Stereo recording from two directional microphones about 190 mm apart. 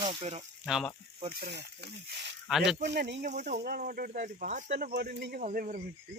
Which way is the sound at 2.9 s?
65° right (ahead or behind).